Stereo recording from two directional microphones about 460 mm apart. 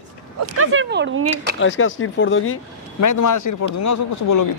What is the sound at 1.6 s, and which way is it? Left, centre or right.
Speech, left.